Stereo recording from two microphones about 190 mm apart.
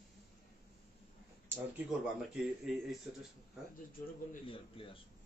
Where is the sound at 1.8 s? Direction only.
5° right (ahead or behind).